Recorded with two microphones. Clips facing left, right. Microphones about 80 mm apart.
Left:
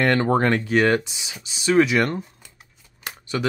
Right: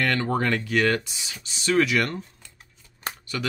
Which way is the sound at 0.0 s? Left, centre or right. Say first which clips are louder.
Left 5 dB; left.